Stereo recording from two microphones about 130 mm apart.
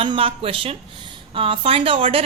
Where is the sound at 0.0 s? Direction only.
45° right (ahead or behind).